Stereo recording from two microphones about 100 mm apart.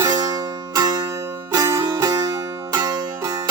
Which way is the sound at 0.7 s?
45° right (ahead or behind).